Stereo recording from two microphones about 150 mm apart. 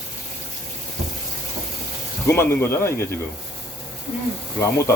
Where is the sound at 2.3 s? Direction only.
15° left (ahead or behind).